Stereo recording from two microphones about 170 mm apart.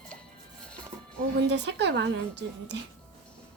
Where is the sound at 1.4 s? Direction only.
90° right.